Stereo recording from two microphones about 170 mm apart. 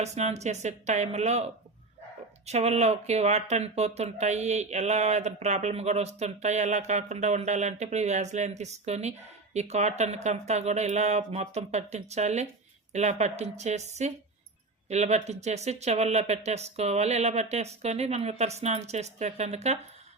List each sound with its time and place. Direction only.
0.0 s speech: 40° right (ahead or behind)
2.5 s speech: 40° right (ahead or behind)